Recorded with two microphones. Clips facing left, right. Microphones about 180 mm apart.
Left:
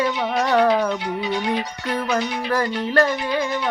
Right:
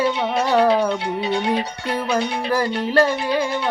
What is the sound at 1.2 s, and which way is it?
Music, 25° right (ahead or behind).